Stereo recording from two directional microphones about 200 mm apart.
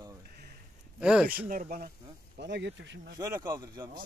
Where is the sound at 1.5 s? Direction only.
45° right (ahead or behind).